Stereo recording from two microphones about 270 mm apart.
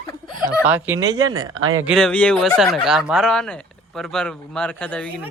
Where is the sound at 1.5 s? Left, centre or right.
Right.